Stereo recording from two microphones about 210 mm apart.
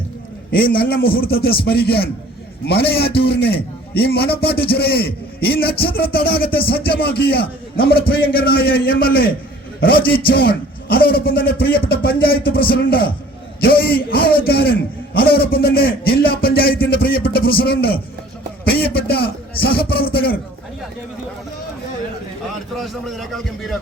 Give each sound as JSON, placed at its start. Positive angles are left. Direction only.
{"t": 0.5, "sound": "a man's voice", "side_deg": 45}
{"t": 3.2, "sound": "a man's voice", "side_deg": 50}
{"t": 22.8, "sound": "a man's voice", "side_deg": 0}